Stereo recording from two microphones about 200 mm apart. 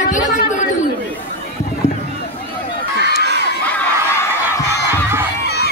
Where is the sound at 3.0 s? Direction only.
55° left (ahead or behind).